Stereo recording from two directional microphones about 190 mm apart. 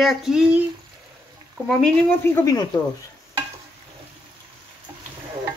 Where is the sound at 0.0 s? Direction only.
Centre (ahead or behind).